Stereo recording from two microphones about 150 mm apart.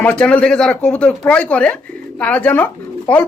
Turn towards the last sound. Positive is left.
turn(degrees=10)  # may be behind; listen again after turning